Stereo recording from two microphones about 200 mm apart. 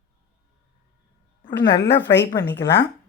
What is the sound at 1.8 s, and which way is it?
Speech, 60° left (ahead or behind).